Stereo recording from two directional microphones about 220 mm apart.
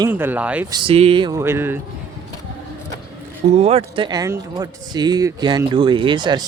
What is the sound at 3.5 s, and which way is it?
Speech, 30° right (ahead or behind).